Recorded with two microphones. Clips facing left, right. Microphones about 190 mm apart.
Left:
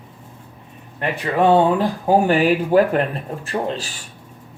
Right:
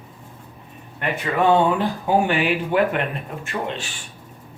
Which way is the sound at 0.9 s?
35° left (ahead or behind).